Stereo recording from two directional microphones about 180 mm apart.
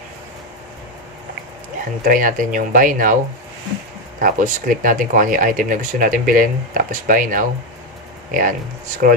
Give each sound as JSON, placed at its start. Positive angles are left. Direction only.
{"t": 2.0, "sound": "speech", "side_deg": -50}
{"t": 4.2, "sound": "speech", "side_deg": -50}